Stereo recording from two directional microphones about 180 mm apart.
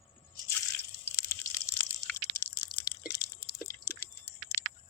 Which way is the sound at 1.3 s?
15° left (ahead or behind).